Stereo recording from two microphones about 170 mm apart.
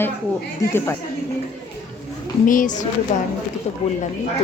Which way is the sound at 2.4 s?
50° left (ahead or behind).